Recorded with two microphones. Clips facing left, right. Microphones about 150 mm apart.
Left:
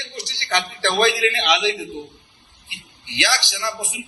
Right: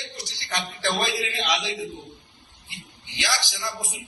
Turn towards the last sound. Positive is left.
turn(degrees=75)  # may be behind; listen again after turning